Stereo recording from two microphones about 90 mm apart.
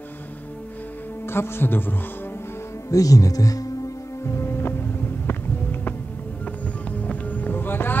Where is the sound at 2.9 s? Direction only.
40° left (ahead or behind).